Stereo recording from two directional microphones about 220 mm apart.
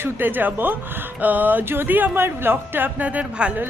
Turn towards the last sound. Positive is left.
turn(degrees=-5)  # may be behind; listen again after turning